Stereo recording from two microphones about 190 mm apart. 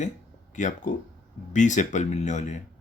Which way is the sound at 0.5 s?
40° left (ahead or behind).